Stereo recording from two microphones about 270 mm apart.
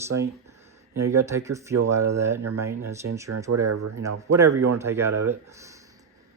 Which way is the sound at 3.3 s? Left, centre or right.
Right.